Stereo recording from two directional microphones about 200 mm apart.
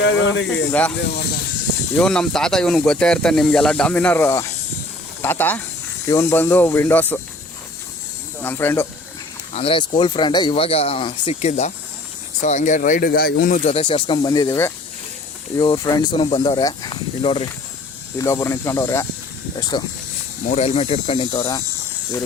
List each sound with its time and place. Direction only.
0.0 s speech: 65° left (ahead or behind)
0.7 s speech: 5° left (ahead or behind)
2.0 s speech: 5° left (ahead or behind)
8.4 s speech: 10° left (ahead or behind)
9.6 s speech: 30° left (ahead or behind); by 13.6 s 50° left (ahead or behind)
13.7 s speech: 25° left (ahead or behind)
18.2 s speech: 15° left (ahead or behind)
20.5 s speech: 30° left (ahead or behind)